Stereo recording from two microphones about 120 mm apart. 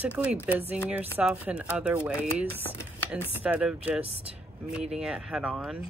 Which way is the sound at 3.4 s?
10° right (ahead or behind).